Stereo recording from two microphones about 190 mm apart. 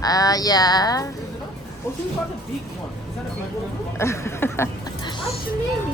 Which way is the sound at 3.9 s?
15° left (ahead or behind).